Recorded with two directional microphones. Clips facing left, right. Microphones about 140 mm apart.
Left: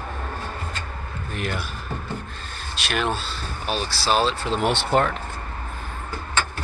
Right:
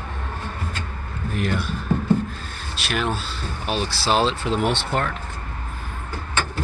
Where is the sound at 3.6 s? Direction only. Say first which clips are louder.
Right 1 dB; 20° right (ahead or behind).